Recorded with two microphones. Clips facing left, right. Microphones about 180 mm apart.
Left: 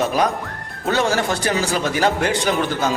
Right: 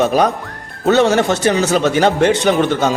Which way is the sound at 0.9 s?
25° right (ahead or behind).